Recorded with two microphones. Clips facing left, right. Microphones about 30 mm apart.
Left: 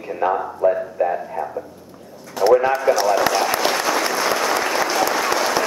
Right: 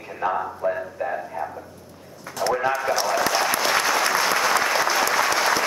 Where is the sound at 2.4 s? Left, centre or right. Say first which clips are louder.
Left 7 dB; centre.